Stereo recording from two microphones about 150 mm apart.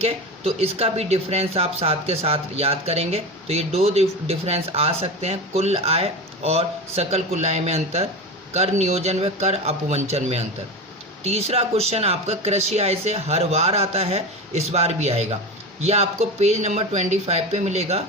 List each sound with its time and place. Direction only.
0.0 s speech: 40° right (ahead or behind)